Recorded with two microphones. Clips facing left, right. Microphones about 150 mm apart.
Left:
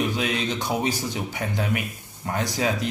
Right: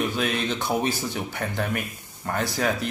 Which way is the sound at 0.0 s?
15° left (ahead or behind).